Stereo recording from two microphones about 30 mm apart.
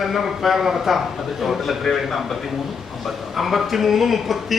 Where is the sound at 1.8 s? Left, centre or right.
Centre.